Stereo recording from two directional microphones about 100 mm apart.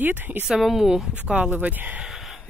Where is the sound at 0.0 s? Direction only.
20° right (ahead or behind).